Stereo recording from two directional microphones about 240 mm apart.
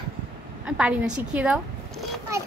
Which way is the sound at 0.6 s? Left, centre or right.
Centre.